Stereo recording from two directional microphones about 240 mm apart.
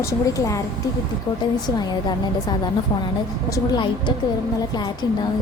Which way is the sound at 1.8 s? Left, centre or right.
Centre.